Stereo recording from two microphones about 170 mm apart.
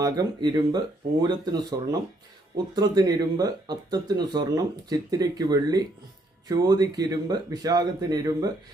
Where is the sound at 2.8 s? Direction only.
20° right (ahead or behind).